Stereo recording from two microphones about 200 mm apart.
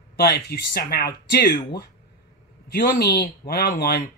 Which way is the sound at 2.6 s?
50° left (ahead or behind).